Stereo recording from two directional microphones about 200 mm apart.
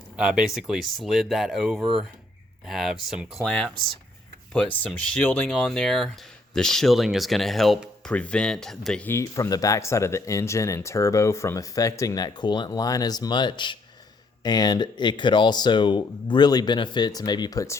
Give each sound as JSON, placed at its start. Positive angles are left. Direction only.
{"t": 0.2, "sound": "speech", "side_deg": -5}
{"t": 4.8, "sound": "speech", "side_deg": 5}